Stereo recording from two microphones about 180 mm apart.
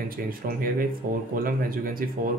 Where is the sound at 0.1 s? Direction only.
55° right (ahead or behind).